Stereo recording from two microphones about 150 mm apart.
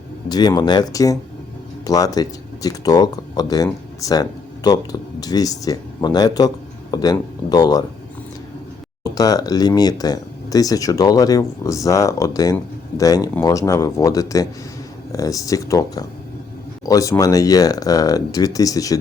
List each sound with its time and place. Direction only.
0.3 s speech: 30° left (ahead or behind)
9.1 s speech: 25° left (ahead or behind)